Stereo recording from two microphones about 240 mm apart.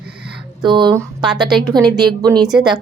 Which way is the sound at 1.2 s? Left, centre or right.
Centre.